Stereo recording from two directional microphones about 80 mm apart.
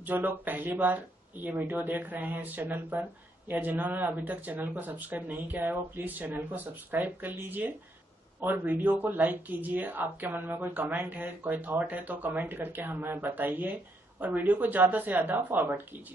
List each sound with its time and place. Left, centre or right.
0.0 s speech: right